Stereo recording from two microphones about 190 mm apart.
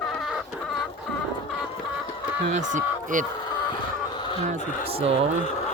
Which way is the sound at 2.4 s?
40° right (ahead or behind).